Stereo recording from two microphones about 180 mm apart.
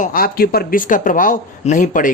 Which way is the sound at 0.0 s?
55° left (ahead or behind).